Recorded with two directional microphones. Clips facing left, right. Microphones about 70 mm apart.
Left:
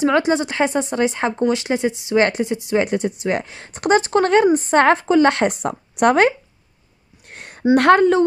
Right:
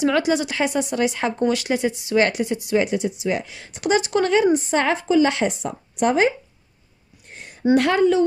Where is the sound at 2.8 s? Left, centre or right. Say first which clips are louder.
Left 2 dB; left.